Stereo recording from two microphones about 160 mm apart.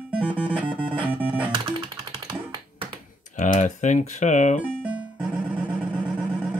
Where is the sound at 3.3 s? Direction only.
55° left (ahead or behind).